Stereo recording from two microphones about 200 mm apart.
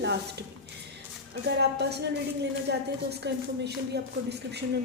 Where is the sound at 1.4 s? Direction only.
55° right (ahead or behind).